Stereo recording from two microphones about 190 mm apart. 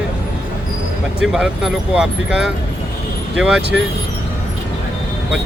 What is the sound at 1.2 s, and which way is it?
Speech, 5° right (ahead or behind).